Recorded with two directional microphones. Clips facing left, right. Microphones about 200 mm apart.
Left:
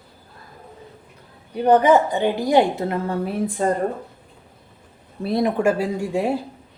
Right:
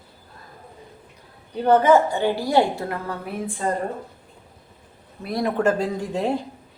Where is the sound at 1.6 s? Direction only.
15° left (ahead or behind).